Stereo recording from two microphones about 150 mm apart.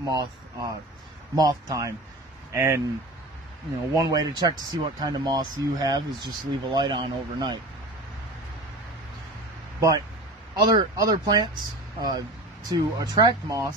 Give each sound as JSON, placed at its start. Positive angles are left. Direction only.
{"t": 0.0, "sound": "speech", "side_deg": -25}
{"t": 3.9, "sound": "speech", "side_deg": -25}
{"t": 9.8, "sound": "speech", "side_deg": -25}